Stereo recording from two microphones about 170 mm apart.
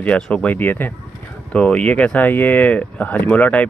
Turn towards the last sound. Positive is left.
turn(degrees=10)  # may be behind; listen again after turning